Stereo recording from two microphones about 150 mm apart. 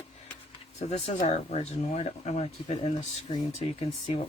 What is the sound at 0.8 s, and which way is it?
Speech, 45° left (ahead or behind).